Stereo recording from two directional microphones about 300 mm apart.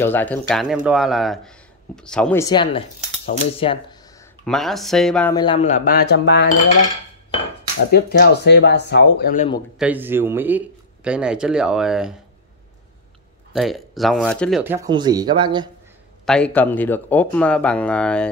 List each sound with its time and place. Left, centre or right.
0.0 s speech: centre
4.5 s speech: centre; by 6.5 s left
7.9 s speech: left
9.8 s speech: centre
13.5 s speech: centre
14.6 s speech: centre
16.3 s speech: centre